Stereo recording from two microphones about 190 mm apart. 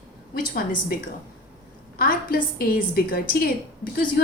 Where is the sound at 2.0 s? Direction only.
50° left (ahead or behind).